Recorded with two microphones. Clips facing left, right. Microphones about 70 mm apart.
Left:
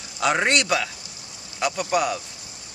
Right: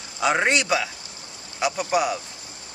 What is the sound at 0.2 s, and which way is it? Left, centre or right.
Speech, centre.